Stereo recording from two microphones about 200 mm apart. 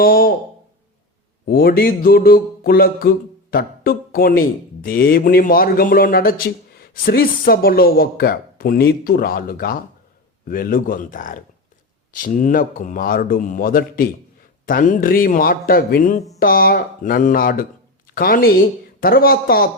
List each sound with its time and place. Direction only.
0.0 s speech: 45° left (ahead or behind)
1.5 s speech: 50° left (ahead or behind)